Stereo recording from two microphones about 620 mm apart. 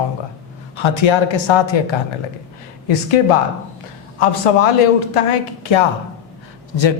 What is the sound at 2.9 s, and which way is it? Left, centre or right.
Speech, left.